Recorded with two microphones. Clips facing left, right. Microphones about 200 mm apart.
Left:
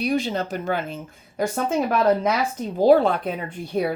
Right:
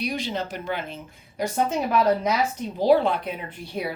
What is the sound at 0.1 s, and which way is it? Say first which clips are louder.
Speech: left 5 dB; 45° left (ahead or behind).